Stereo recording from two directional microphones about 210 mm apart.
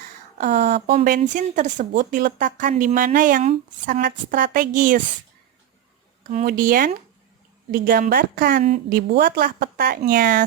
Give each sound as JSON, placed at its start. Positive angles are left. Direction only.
{"t": 0.3, "sound": "speech", "side_deg": -30}
{"t": 6.4, "sound": "a woman's voice", "side_deg": -45}